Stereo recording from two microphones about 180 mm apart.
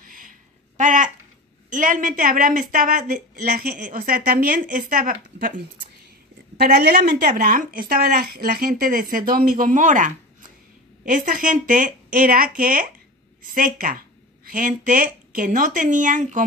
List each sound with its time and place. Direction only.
0.0 s a sound: 50° right (ahead or behind)
1.7 s a woman's voice: 50° right (ahead or behind)
6.5 s a woman's voice: 60° right (ahead or behind); by 16.4 s 45° right (ahead or behind)